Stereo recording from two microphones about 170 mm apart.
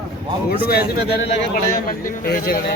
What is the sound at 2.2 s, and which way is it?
Speech, 65° left (ahead or behind).